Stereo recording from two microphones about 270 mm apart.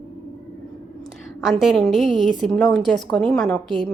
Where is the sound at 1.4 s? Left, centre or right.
Centre.